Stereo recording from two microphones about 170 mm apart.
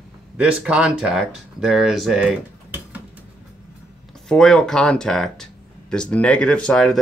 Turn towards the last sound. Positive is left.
turn(degrees=5)  # may be behind; listen again after turning